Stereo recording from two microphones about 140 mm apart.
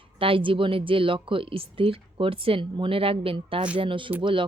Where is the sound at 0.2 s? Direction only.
40° right (ahead or behind).